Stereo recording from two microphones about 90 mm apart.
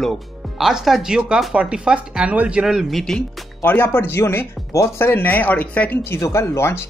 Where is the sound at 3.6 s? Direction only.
25° left (ahead or behind).